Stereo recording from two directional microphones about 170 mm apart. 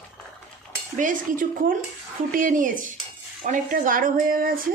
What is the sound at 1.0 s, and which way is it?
Speech, 50° right (ahead or behind).